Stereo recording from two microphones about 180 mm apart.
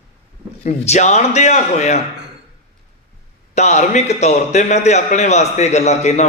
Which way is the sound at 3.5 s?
40° left (ahead or behind).